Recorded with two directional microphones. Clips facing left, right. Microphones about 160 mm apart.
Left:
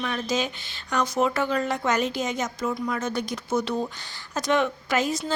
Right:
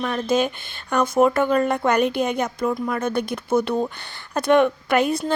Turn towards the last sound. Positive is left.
turn(degrees=-60)  # may be behind; listen again after turning